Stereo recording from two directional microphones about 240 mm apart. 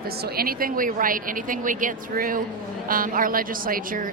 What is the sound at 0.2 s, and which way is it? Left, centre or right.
A woman's voice, right.